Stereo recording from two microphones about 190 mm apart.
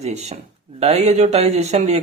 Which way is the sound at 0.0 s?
35° right (ahead or behind).